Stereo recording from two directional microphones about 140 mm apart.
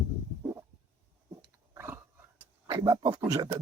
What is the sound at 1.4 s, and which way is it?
Dog, 15° right (ahead or behind).